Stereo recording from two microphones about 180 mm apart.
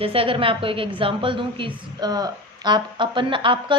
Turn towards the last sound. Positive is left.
turn(degrees=-30)  # may be behind; listen again after turning